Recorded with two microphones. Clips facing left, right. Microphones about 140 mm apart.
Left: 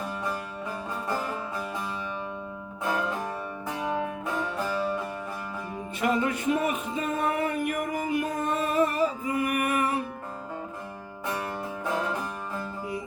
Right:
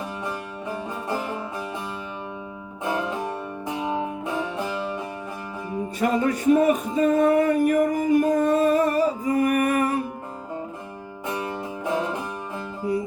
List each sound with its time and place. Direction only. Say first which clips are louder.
2.8 s music: right 3 dB; 20° right (ahead or behind)
6.0 s music: right 3 dB; 40° right (ahead or behind)